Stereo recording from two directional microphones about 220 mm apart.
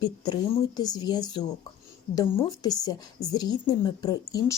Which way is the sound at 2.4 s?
15° left (ahead or behind).